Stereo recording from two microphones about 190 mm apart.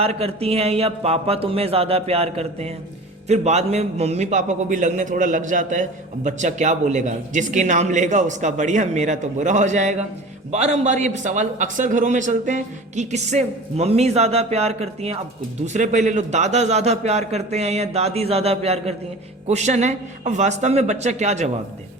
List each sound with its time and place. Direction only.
0.0 s a man's voice: 30° right (ahead or behind)